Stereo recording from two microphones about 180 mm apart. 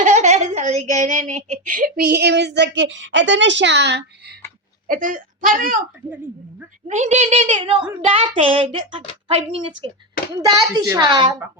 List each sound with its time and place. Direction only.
0.0 s a woman's voice: 40° right (ahead or behind); by 4.4 s 70° right (ahead or behind)
4.9 s a woman's voice: 50° right (ahead or behind)
6.8 s a woman's voice: 40° right (ahead or behind)
10.4 s a child's voice: 20° right (ahead or behind)